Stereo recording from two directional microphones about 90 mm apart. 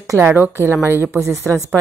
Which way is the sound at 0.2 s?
20° right (ahead or behind).